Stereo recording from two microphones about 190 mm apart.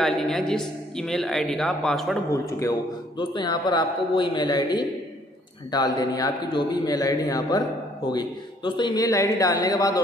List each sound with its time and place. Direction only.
0.0 s a woman's voice: centre (ahead or behind)
2.3 s a man's voice: 15° left (ahead or behind)